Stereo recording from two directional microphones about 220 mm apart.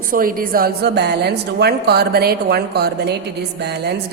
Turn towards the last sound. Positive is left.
turn(degrees=-50)  # may be behind; listen again after turning